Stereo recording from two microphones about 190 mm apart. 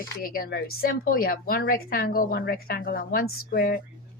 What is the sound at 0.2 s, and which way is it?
A woman's voice, 50° left (ahead or behind).